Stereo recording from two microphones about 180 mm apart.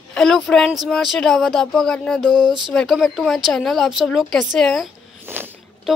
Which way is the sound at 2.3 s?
25° right (ahead or behind).